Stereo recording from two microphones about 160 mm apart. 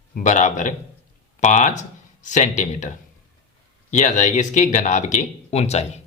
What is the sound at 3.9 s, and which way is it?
Speech, 50° left (ahead or behind).